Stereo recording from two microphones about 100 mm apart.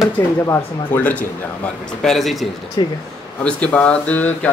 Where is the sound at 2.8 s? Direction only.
45° left (ahead or behind).